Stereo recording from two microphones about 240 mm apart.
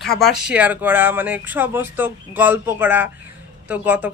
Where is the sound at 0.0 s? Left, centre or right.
Centre.